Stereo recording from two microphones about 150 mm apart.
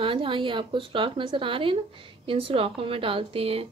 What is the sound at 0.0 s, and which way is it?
A woman's voice, 35° right (ahead or behind).